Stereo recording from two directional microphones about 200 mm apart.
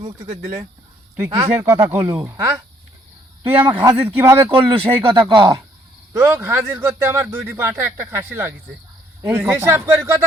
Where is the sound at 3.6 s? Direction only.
20° right (ahead or behind).